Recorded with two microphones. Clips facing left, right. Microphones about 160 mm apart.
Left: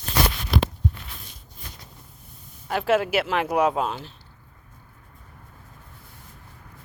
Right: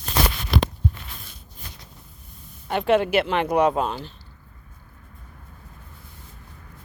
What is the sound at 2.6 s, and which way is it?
Speech, centre (ahead or behind).